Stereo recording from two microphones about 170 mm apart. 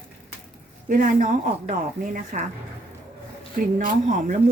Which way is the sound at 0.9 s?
50° right (ahead or behind).